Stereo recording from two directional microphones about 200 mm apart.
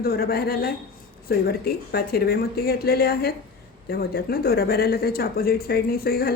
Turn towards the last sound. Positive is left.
turn(degrees=50)  # may be behind; listen again after turning